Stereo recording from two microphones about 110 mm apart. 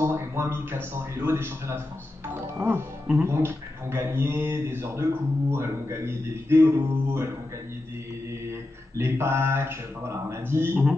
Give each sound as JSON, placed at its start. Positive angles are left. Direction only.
{"t": 0.0, "sound": "speech", "side_deg": -25}
{"t": 8.5, "sound": "speech", "side_deg": -25}